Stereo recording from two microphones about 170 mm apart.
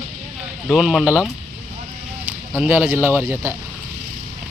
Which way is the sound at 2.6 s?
10° right (ahead or behind).